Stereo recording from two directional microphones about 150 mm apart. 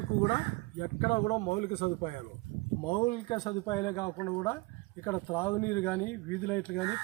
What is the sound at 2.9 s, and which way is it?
Speech, 30° left (ahead or behind).